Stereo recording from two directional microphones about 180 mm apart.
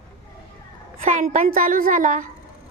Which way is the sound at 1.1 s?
45° right (ahead or behind).